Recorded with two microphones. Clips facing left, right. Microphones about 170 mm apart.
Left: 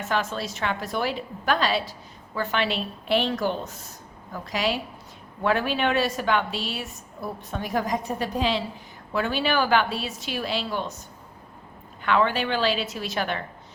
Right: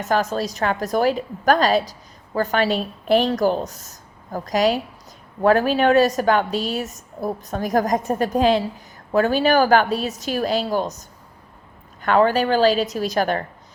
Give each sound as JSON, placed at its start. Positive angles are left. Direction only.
{"t": 0.0, "sound": "a woman's voice", "side_deg": -40}
{"t": 12.0, "sound": "a woman's voice", "side_deg": -40}